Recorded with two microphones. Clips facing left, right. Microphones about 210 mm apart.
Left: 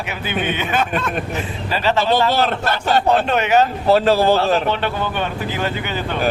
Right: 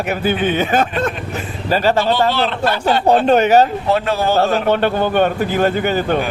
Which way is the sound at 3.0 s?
35° right (ahead or behind).